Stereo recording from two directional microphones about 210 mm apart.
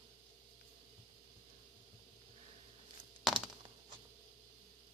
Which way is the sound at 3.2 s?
Centre (ahead or behind).